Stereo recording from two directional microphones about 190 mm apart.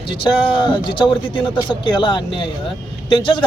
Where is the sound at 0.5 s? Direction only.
25° left (ahead or behind).